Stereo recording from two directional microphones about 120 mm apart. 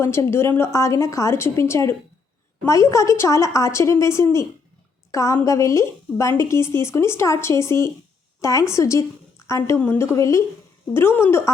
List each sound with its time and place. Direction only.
0.0 s a woman's voice: 20° left (ahead or behind)